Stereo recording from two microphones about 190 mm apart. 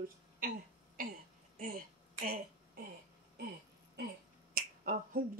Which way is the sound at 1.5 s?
50° right (ahead or behind).